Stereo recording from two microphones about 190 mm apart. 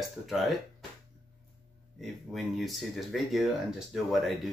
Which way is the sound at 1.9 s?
Centre (ahead or behind).